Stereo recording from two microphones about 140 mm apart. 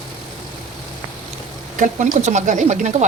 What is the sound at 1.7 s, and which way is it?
Speech, 65° right (ahead or behind).